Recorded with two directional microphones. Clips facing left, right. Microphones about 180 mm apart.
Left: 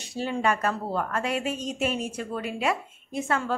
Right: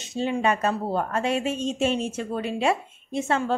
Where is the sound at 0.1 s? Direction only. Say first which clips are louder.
Right 2 dB; 20° right (ahead or behind).